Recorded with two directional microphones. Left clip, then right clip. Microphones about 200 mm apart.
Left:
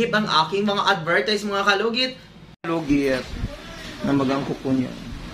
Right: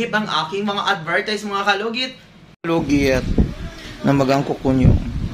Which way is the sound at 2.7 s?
40° right (ahead or behind).